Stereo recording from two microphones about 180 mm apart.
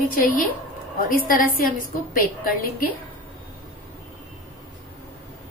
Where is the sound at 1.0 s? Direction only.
50° left (ahead or behind).